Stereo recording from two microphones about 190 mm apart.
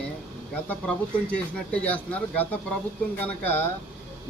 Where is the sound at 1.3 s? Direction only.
5° left (ahead or behind).